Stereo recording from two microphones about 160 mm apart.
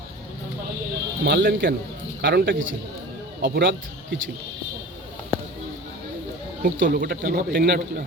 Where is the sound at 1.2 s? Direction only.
90° right; by 2.6 s 75° right (ahead or behind).